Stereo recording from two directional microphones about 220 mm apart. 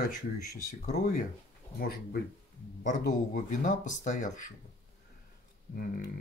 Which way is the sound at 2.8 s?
35° left (ahead or behind).